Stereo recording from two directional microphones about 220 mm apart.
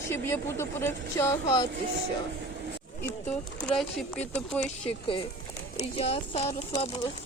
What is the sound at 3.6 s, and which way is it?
Speech, 5° left (ahead or behind).